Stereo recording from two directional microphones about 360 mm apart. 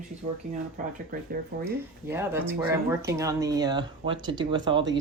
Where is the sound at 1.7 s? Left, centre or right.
Centre.